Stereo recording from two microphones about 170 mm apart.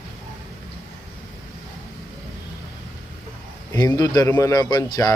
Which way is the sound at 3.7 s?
25° left (ahead or behind).